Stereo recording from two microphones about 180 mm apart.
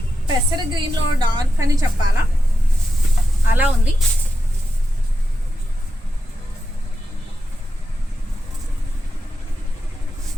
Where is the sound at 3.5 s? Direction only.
10° right (ahead or behind).